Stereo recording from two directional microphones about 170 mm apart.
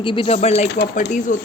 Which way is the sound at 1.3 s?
50° left (ahead or behind).